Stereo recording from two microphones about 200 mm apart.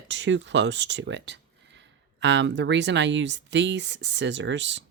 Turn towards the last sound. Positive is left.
turn(degrees=-65)  # may be behind; listen again after turning